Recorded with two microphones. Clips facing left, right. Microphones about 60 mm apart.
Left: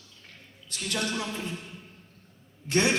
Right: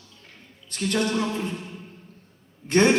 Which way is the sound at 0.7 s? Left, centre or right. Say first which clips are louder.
Right 7 dB; right.